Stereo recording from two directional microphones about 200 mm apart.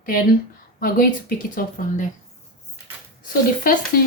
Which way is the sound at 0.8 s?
45° left (ahead or behind).